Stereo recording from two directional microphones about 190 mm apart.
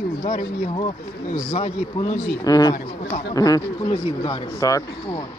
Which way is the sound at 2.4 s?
20° left (ahead or behind).